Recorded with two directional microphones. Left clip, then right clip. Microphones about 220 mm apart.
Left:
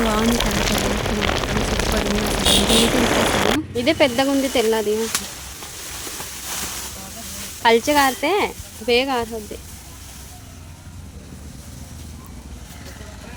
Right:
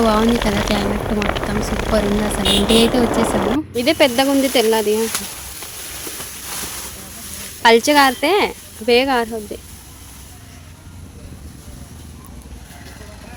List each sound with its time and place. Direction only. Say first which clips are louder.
0.1 s speech: right 4 dB; centre (ahead or behind)
3.8 s speech: right 4 dB; 15° right (ahead or behind)
7.6 s speech: right 4 dB; 20° right (ahead or behind)